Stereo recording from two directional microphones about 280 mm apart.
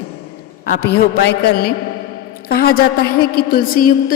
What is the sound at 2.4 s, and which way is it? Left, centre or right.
A woman's voice, left.